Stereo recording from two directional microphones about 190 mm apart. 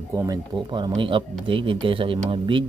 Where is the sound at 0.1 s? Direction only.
20° right (ahead or behind).